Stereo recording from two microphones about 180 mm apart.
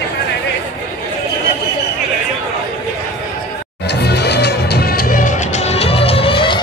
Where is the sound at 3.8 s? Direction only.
65° left (ahead or behind).